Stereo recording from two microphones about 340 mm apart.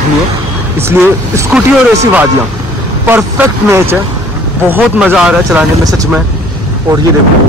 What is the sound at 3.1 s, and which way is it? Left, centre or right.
Speech, centre.